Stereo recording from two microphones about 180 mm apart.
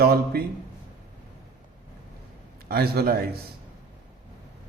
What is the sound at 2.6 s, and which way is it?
Speech, 60° right (ahead or behind).